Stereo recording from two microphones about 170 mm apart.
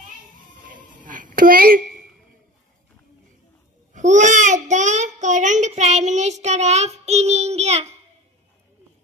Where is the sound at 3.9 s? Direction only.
45° right (ahead or behind).